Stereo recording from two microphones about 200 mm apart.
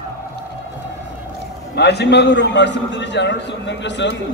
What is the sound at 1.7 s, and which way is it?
A man's voice, 55° left (ahead or behind).